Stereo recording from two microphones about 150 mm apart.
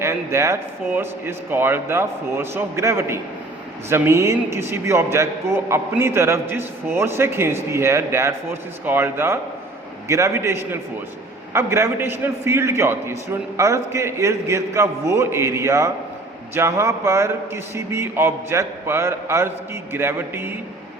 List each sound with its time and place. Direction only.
0.0 s a man's voice: 20° right (ahead or behind)